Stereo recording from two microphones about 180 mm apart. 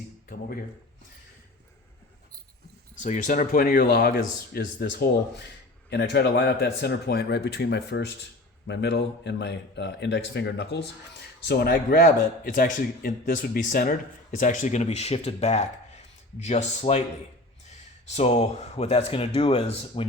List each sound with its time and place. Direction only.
3.0 s speech: 45° left (ahead or behind); by 5.1 s 60° left (ahead or behind)
5.9 s a man's voice: 70° left (ahead or behind)
11.4 s speech: 60° left (ahead or behind); by 17.0 s 35° left (ahead or behind)
18.1 s speech: 35° left (ahead or behind)